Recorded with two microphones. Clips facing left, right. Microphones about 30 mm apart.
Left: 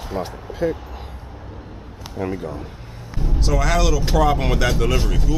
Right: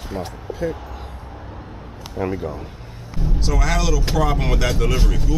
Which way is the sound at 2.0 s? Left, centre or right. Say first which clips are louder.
Right 2 dB; centre.